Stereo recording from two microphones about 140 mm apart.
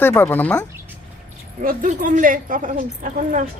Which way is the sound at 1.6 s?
80° right.